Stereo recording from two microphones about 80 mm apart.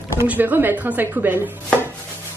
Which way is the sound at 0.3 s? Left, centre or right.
Right.